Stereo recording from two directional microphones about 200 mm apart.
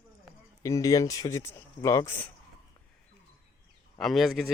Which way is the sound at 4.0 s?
Centre (ahead or behind).